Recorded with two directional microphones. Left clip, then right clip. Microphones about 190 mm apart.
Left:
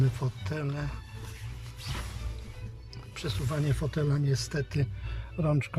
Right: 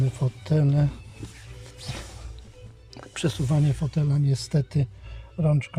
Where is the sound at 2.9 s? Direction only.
35° right (ahead or behind).